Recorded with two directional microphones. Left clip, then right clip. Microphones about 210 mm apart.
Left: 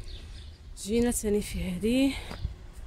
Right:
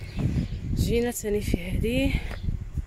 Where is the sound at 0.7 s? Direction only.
10° left (ahead or behind).